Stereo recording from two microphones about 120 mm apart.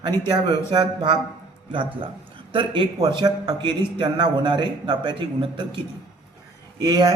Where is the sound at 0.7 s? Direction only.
40° right (ahead or behind).